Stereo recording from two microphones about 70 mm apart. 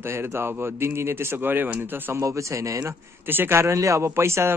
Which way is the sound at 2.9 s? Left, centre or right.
Right.